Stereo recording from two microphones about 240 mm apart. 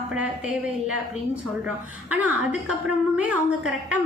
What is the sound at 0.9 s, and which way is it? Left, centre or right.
A woman's voice, centre.